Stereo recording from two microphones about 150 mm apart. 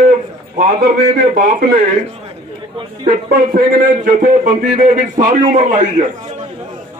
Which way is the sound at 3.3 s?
65° right (ahead or behind).